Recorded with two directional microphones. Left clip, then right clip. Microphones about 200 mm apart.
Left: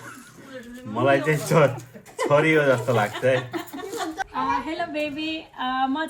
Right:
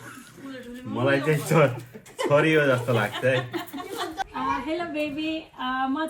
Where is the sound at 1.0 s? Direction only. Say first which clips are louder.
Left 3 dB; 5° left (ahead or behind).